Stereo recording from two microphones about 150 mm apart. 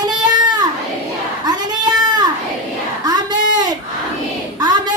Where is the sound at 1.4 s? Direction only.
30° right (ahead or behind).